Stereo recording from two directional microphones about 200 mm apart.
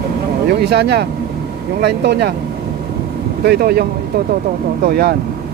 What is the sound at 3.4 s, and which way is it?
Speech, 50° right (ahead or behind).